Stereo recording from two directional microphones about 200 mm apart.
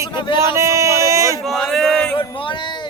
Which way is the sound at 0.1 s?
25° left (ahead or behind).